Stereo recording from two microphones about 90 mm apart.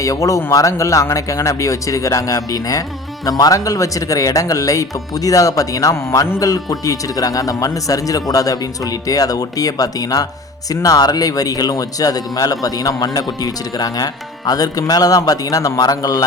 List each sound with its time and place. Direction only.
0.0 s speech: 40° left (ahead or behind)
6.4 s speech: 40° left (ahead or behind)